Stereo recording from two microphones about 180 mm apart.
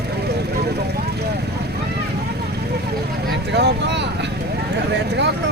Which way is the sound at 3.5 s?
70° right (ahead or behind).